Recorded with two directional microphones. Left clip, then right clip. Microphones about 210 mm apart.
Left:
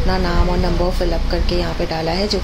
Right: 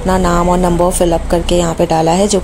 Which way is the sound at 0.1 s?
35° right (ahead or behind).